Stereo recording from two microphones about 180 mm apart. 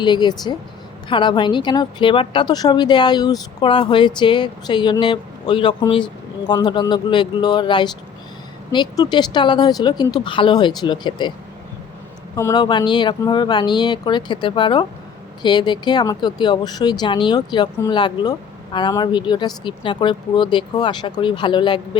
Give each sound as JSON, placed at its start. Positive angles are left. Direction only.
{"t": 0.0, "sound": "speech", "side_deg": 25}
{"t": 12.4, "sound": "speech", "side_deg": 20}